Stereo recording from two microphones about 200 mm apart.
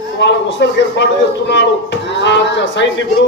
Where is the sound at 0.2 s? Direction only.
60° left (ahead or behind).